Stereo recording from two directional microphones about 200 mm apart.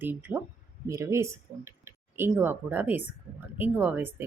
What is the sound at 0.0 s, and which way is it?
Speech, 10° right (ahead or behind).